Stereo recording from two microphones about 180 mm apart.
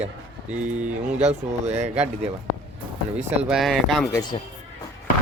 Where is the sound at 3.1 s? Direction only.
5° right (ahead or behind).